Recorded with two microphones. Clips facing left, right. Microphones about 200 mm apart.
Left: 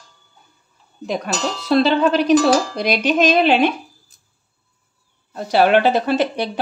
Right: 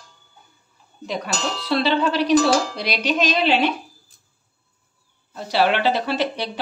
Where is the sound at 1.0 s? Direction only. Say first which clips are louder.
Left 4 dB; 45° left (ahead or behind).